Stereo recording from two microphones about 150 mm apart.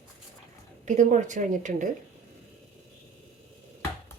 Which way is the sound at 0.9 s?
55° right (ahead or behind).